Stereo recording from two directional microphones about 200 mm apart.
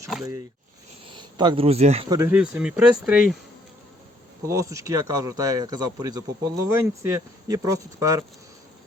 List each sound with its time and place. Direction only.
1.1 s speech: 20° right (ahead or behind)
2.0 s speech: 15° right (ahead or behind)
2.3 s speech: 5° right (ahead or behind)
4.4 s speech: 15° right (ahead or behind)